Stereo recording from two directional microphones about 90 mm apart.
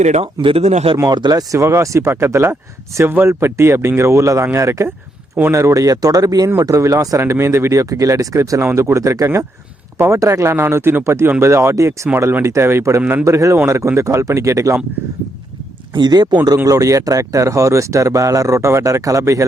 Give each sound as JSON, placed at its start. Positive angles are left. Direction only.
{"t": 0.4, "sound": "speech", "side_deg": -80}
{"t": 1.1, "sound": "speech", "side_deg": -50}
{"t": 12.0, "sound": "speech", "side_deg": -25}
{"t": 16.0, "sound": "speech", "side_deg": -50}